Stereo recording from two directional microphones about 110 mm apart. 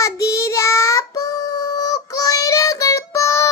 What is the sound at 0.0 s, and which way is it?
Child singing, 30° left (ahead or behind).